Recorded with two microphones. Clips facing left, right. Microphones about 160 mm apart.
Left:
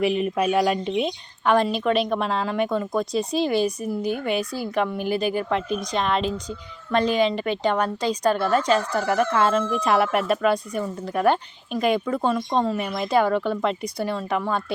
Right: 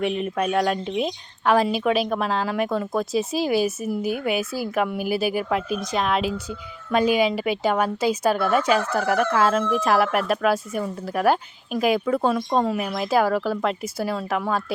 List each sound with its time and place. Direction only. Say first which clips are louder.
0.0 s a woman's voice: left 2 dB; 5° left (ahead or behind)